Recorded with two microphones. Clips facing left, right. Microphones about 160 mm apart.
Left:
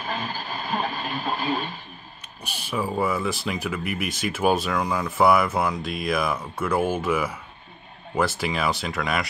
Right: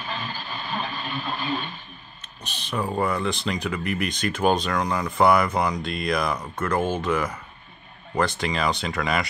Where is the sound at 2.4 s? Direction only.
10° left (ahead or behind).